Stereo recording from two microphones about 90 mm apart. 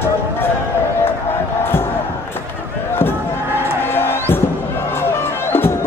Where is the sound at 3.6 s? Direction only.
25° left (ahead or behind).